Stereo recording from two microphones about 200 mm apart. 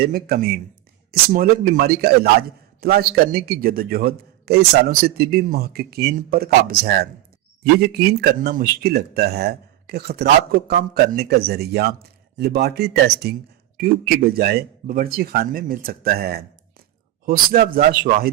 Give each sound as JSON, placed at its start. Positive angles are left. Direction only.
{"t": 0.0, "sound": "speech", "side_deg": -50}